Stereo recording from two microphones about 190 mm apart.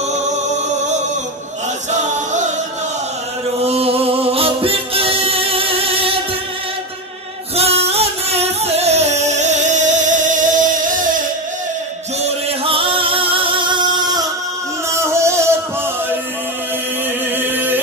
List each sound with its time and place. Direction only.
1.9 s music: 40° right (ahead or behind)
3.6 s music: 30° right (ahead or behind)
7.5 s music: 30° right (ahead or behind)
12.4 s singing: 30° right (ahead or behind)
14.9 s music: 15° right (ahead or behind)
17.5 s music: 10° right (ahead or behind)